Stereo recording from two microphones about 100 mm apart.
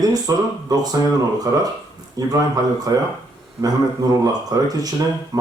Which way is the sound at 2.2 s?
40° right (ahead or behind).